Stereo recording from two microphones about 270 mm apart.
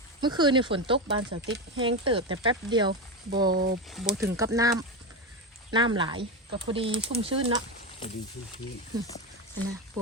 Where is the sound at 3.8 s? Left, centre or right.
Centre.